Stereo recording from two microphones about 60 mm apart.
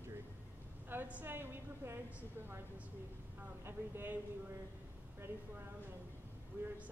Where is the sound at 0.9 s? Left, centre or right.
Right.